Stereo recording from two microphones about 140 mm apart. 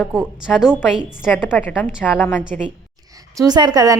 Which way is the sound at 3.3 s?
30° right (ahead or behind).